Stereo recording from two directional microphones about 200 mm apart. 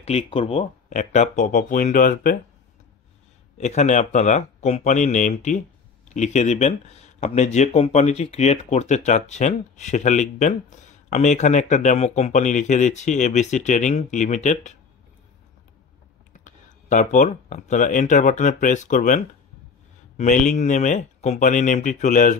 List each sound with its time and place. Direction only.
0.0 s speech: 30° left (ahead or behind)
3.5 s speech: 35° left (ahead or behind)
16.3 s speech: 40° left (ahead or behind)